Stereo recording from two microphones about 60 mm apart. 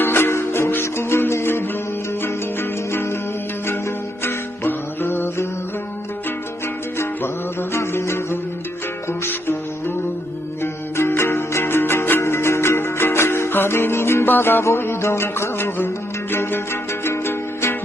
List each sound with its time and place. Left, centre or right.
0.0 s music: left
4.2 s music: left
7.7 s music: left
14.6 s music: left